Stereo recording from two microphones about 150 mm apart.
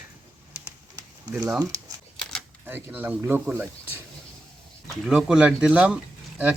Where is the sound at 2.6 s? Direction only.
15° right (ahead or behind).